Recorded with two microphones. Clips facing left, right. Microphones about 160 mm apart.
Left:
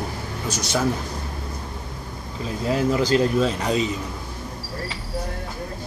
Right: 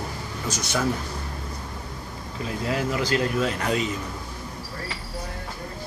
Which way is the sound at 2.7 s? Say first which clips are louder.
Left 6 dB; 30° left (ahead or behind).